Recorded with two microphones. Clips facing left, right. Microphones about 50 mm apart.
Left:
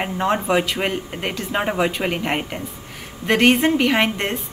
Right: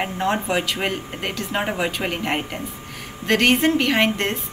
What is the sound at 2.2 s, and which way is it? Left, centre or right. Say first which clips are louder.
Speech: left 1 dB; centre.